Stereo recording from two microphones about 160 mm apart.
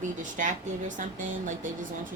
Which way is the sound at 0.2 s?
50° right (ahead or behind).